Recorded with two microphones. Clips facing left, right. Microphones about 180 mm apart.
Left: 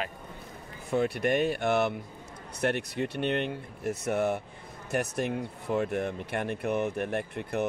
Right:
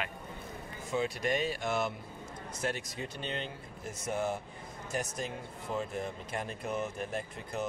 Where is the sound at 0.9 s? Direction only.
60° left (ahead or behind).